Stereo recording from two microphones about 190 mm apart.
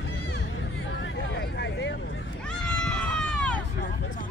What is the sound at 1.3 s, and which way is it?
Vehicle, 65° left (ahead or behind).